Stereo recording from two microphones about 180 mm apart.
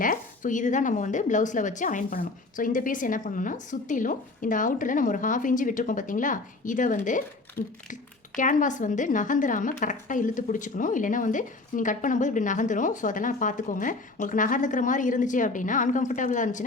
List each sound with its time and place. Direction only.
0.0 s speech: 45° left (ahead or behind)
7.6 s speech: 60° left (ahead or behind)
8.4 s speech: 45° left (ahead or behind)